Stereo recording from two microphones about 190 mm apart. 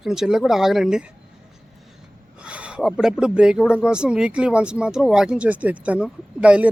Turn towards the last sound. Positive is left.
turn(degrees=-5)  # may be behind; listen again after turning